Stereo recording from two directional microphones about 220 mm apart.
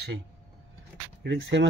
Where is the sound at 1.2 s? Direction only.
55° right (ahead or behind).